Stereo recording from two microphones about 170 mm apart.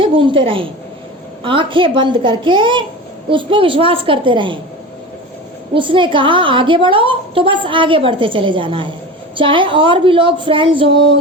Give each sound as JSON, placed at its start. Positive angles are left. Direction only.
{"t": 0.0, "sound": "a woman's voice", "side_deg": -30}
{"t": 5.7, "sound": "a woman's voice", "side_deg": -30}